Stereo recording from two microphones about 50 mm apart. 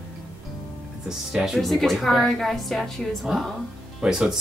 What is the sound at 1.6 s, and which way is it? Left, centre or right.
A woman's voice, centre.